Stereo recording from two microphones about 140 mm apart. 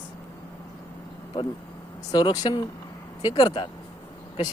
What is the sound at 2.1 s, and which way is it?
A man's voice, 30° left (ahead or behind).